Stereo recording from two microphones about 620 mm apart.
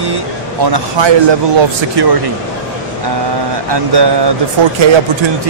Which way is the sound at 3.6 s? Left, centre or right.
Right.